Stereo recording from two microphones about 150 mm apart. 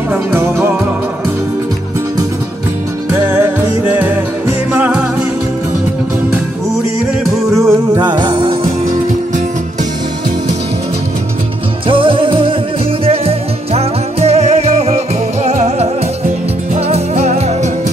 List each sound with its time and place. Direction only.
0.1 s music: 15° right (ahead or behind)
3.1 s music: 15° right (ahead or behind)
7.2 s music: centre (ahead or behind)
7.7 s music: 25° right (ahead or behind)
11.9 s music: 35° right (ahead or behind)